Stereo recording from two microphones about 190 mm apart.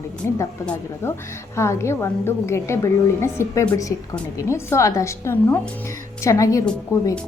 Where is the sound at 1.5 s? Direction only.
15° left (ahead or behind).